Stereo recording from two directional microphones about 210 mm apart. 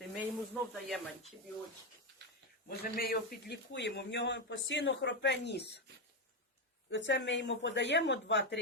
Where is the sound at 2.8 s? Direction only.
45° left (ahead or behind).